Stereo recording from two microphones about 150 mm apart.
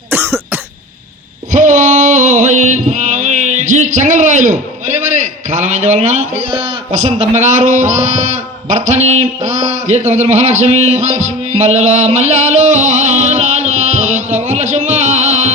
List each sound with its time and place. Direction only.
0.1 s cough: 15° right (ahead or behind)
1.5 s music: 55° right (ahead or behind)
6.5 s a man's voice: 40° right (ahead or behind)